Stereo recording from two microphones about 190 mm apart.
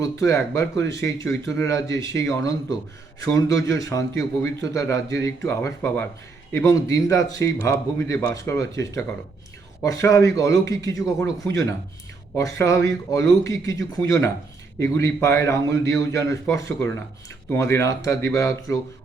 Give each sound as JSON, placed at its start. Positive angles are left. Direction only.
{"t": 0.0, "sound": "a man's voice", "side_deg": 15}